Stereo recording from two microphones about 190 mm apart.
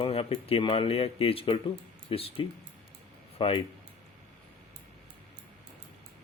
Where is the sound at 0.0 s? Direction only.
30° left (ahead or behind).